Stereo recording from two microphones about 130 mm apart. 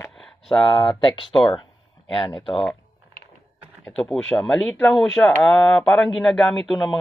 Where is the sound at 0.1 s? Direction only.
5° left (ahead or behind).